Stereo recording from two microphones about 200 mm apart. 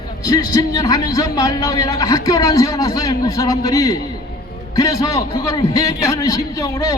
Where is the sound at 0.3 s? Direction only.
20° left (ahead or behind).